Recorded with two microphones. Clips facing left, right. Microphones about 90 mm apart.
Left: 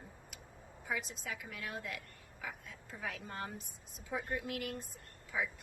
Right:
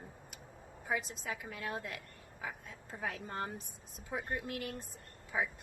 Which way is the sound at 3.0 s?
30° right (ahead or behind).